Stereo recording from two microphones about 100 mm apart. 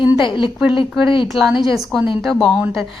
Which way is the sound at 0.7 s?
60° left (ahead or behind).